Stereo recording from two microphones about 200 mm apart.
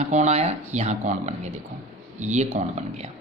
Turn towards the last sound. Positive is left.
turn(degrees=-35)  # may be behind; listen again after turning